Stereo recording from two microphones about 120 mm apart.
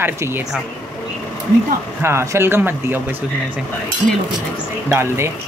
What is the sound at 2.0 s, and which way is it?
Speech, 20° right (ahead or behind).